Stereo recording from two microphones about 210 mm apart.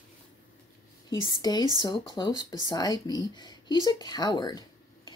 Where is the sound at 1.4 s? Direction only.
20° left (ahead or behind).